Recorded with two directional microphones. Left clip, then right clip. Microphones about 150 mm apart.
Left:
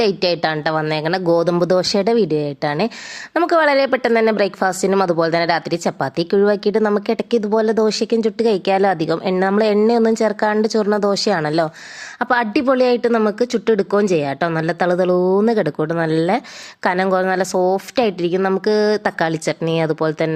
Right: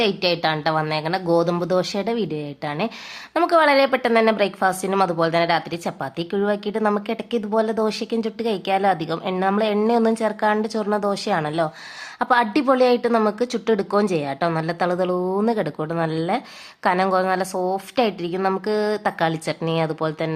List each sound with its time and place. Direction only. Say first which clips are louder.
0.0 s a woman's voice: left 3 dB; 35° left (ahead or behind)